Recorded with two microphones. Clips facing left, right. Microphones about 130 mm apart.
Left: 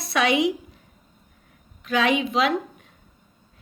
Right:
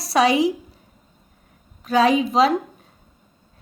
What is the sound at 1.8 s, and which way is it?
Speech, 40° right (ahead or behind).